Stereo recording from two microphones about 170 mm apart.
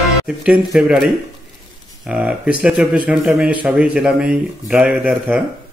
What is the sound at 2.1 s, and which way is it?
Speech, 5° right (ahead or behind).